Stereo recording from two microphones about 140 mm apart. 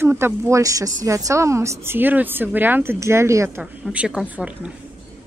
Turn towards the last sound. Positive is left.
turn(degrees=-10)  # may be behind; listen again after turning